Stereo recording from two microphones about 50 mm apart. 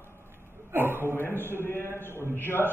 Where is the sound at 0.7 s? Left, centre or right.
Right.